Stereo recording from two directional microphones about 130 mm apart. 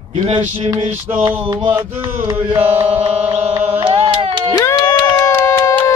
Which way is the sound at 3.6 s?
15° right (ahead or behind).